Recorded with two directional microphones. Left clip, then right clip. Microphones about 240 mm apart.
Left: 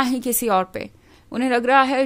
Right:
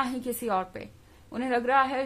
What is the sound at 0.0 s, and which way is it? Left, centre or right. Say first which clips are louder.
A woman's voice: left 8 dB; left.